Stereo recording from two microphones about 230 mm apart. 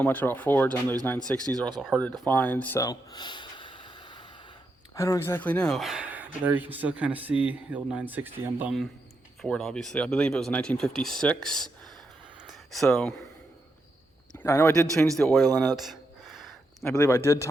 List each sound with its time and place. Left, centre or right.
0.0 s speech: centre
1.8 s a sound: centre
4.9 s speech: centre
14.3 s speech: centre
16.8 s speech: centre